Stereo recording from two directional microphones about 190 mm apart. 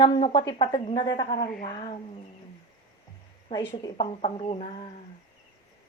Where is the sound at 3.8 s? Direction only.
25° left (ahead or behind).